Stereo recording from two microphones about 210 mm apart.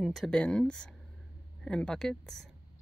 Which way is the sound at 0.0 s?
Centre (ahead or behind).